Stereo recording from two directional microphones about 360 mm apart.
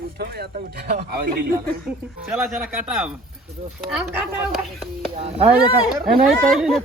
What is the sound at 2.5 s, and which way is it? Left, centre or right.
Speech, centre.